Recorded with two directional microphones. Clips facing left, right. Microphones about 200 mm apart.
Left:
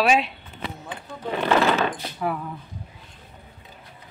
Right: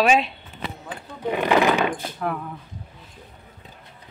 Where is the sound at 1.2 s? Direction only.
15° right (ahead or behind).